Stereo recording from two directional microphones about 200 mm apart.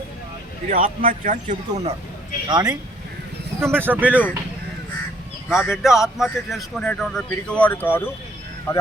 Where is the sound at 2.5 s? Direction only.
20° right (ahead or behind).